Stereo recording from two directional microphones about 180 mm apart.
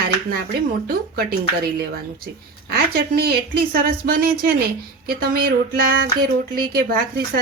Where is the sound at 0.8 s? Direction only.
55° right (ahead or behind).